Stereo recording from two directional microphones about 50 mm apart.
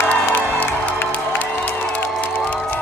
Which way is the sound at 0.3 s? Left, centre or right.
Left.